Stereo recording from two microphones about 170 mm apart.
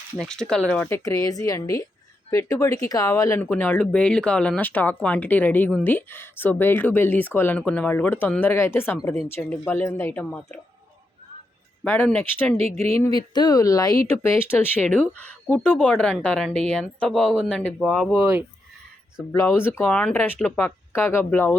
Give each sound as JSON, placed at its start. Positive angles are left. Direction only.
{"t": 0.2, "sound": "speech", "side_deg": 5}
{"t": 11.8, "sound": "speech", "side_deg": 5}
{"t": 12.5, "sound": "speech", "side_deg": -35}
{"t": 13.3, "sound": "speech", "side_deg": 25}
{"t": 18.2, "sound": "speech", "side_deg": -15}
{"t": 19.3, "sound": "speech", "side_deg": 20}